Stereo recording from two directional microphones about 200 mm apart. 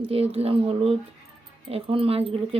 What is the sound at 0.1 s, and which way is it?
Speech, 30° right (ahead or behind).